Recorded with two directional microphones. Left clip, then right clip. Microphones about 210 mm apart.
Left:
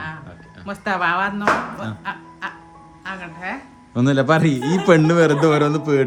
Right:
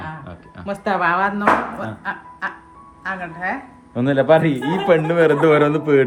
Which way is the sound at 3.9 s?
35° left (ahead or behind).